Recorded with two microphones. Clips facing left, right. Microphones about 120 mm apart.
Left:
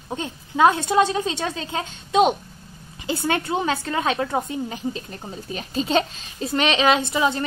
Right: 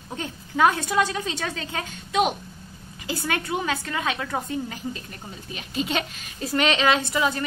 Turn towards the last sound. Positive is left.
turn(degrees=25)  # may be behind; listen again after turning